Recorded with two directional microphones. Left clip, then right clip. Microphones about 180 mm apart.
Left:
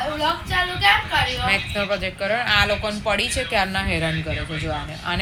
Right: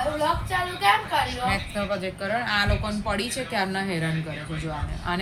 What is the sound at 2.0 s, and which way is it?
Speech, 20° left (ahead or behind).